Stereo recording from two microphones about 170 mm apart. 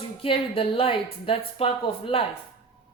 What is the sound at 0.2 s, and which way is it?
A woman's voice, 30° left (ahead or behind).